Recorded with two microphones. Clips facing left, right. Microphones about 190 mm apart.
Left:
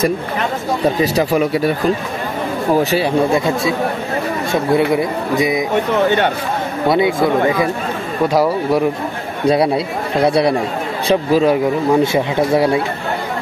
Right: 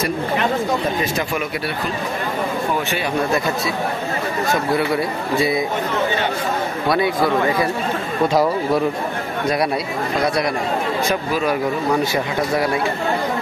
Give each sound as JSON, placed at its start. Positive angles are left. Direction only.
{"t": 1.1, "sound": "speech", "side_deg": 35}
{"t": 2.7, "sound": "speech", "side_deg": 35}
{"t": 3.3, "sound": "speech", "side_deg": 25}
{"t": 6.9, "sound": "speech", "side_deg": 25}
{"t": 10.2, "sound": "speech", "side_deg": 30}